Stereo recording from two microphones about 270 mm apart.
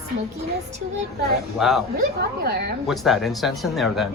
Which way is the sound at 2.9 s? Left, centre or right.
Centre.